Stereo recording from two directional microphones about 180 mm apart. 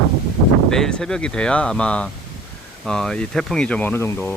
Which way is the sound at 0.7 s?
5° left (ahead or behind).